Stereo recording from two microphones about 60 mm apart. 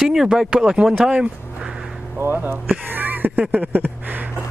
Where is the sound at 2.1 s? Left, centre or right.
Right.